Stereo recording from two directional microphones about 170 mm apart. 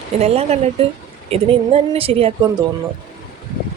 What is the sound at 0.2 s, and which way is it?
A woman's voice, 40° right (ahead or behind).